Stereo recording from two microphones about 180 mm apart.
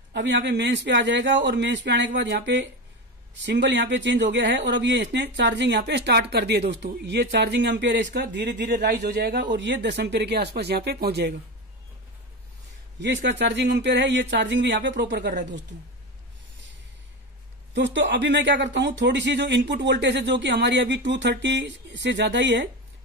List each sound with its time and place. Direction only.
0.1 s a man's voice: 75° right (ahead or behind)
13.0 s speech: 80° right
17.7 s speech: 85° right